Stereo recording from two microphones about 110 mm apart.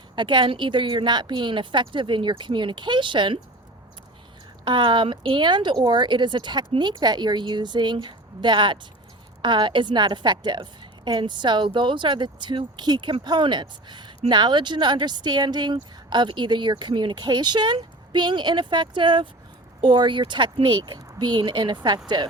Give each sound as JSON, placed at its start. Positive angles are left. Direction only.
{"t": 0.2, "sound": "speech", "side_deg": -45}
{"t": 4.6, "sound": "speech", "side_deg": -45}